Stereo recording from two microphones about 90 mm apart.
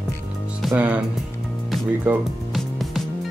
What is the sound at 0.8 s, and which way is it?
Speech, 15° right (ahead or behind).